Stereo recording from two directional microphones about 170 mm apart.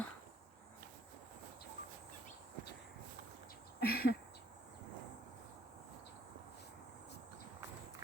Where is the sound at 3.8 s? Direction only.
65° left (ahead or behind).